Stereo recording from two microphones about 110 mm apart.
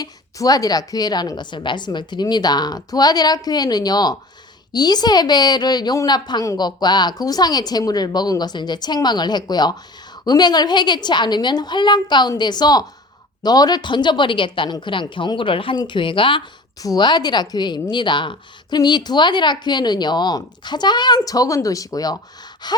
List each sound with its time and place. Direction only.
0.0 s a woman's voice: 35° left (ahead or behind); by 16.4 s 50° left (ahead or behind)
16.8 s a woman's voice: 40° left (ahead or behind)